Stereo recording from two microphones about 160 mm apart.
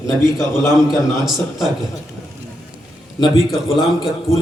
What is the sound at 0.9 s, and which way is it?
Speech, centre (ahead or behind).